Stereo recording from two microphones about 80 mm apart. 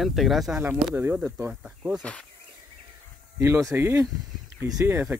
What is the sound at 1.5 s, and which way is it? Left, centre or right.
Speech, centre.